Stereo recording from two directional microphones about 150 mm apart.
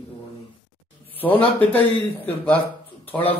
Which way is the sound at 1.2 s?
40° left (ahead or behind).